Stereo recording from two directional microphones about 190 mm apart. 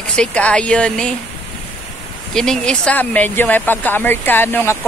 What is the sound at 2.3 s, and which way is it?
Speech, 5° left (ahead or behind).